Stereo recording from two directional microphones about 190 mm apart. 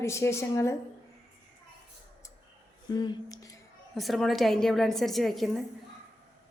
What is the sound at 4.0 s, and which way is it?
A woman's voice, centre (ahead or behind).